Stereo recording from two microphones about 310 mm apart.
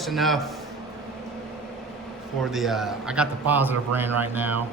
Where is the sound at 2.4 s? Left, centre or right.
Centre.